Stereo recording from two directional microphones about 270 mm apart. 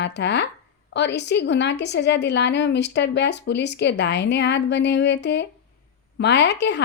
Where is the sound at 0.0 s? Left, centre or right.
Left.